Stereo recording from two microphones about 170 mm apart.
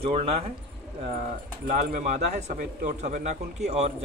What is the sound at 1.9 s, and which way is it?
A man's voice, 45° right (ahead or behind).